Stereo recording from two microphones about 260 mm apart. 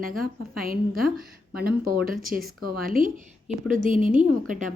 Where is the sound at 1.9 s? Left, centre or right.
Centre.